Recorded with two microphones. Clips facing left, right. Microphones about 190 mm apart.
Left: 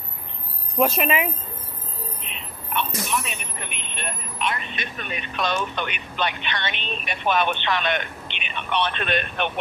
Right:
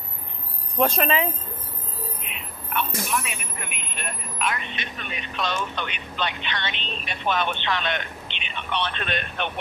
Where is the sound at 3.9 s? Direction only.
25° left (ahead or behind).